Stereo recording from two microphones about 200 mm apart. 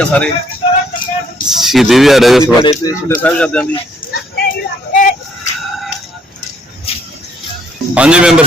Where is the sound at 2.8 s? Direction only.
15° left (ahead or behind).